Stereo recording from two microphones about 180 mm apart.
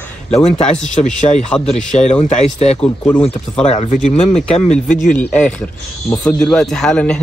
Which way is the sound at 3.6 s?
40° left (ahead or behind).